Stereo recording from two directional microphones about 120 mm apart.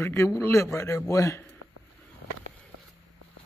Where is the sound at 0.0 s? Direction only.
25° left (ahead or behind).